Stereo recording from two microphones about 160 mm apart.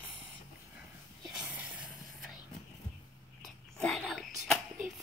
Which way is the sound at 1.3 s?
5° right (ahead or behind).